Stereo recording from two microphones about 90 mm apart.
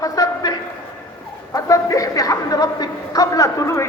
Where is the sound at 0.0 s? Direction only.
45° left (ahead or behind).